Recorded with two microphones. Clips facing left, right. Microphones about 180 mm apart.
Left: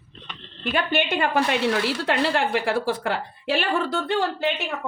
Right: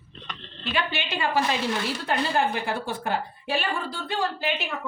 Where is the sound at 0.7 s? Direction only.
55° left (ahead or behind).